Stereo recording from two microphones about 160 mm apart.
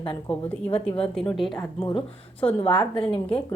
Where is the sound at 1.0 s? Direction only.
5° left (ahead or behind).